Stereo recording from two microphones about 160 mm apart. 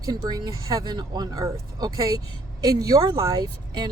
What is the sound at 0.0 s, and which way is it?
Speech, 25° right (ahead or behind).